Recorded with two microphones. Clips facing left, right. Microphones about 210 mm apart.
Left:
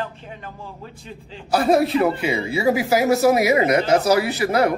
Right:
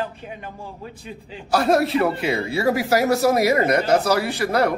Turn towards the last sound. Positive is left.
turn(degrees=5)  # may be behind; listen again after turning